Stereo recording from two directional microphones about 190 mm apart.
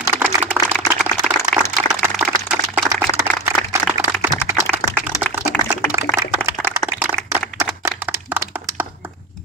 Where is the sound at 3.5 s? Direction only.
15° right (ahead or behind).